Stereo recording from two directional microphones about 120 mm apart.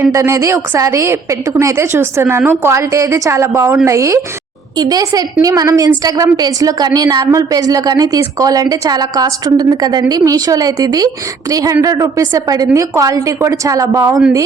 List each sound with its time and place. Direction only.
0.1 s a woman's voice: 25° right (ahead or behind)